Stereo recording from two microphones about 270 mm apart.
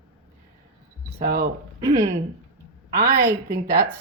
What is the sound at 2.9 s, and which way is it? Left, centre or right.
Speech, right.